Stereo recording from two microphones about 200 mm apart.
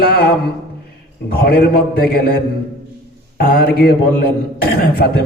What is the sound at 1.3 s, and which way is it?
Speech, 50° left (ahead or behind).